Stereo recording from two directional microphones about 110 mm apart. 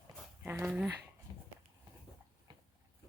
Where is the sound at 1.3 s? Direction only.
35° right (ahead or behind).